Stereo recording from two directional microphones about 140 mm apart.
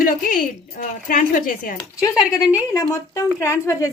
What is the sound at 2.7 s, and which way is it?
Speech, 25° left (ahead or behind).